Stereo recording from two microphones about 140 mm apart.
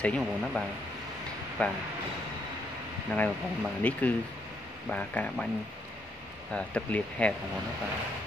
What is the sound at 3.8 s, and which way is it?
Speech, 10° left (ahead or behind).